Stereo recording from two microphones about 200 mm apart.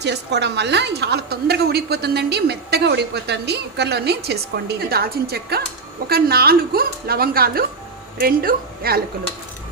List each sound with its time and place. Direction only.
0.0 s a woman's voice: 60° right (ahead or behind)